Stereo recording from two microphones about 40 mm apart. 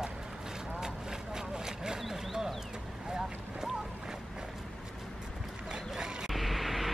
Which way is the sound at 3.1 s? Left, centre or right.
Centre.